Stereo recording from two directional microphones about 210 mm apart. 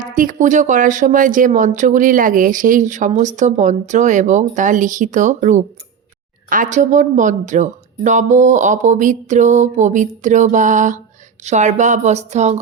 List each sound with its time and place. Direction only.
0.0 s speech: 40° right (ahead or behind)